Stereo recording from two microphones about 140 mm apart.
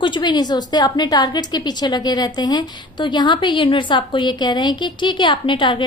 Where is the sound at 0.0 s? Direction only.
35° left (ahead or behind).